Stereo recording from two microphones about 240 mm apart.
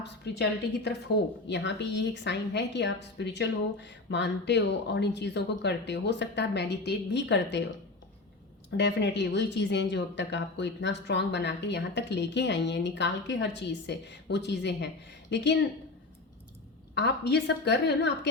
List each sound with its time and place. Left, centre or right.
0.0 s a woman's voice: left
8.7 s a woman's voice: left
16.9 s a woman's voice: left